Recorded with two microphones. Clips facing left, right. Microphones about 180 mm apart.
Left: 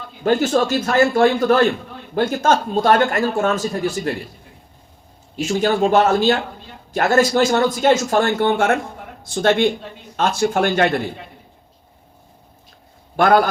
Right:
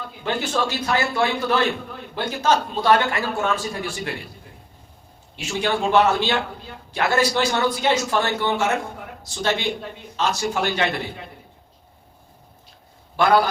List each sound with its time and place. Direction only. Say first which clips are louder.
0.2 s a man's voice: left 8 dB; 45° left (ahead or behind)
5.5 s a man's voice: left 5 dB; 40° left (ahead or behind)
13.1 s a man's voice: left 3 dB; 50° left (ahead or behind)